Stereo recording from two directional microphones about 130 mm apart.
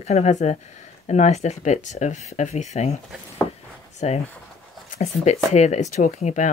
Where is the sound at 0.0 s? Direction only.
60° left (ahead or behind).